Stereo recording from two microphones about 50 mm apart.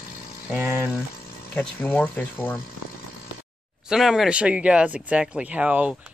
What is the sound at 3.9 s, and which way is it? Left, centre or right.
Speech, centre.